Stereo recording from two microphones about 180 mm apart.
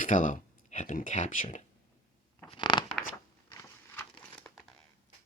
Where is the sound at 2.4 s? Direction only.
25° left (ahead or behind).